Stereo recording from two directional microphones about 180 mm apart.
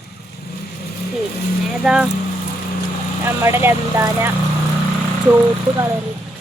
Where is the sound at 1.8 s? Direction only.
5° right (ahead or behind).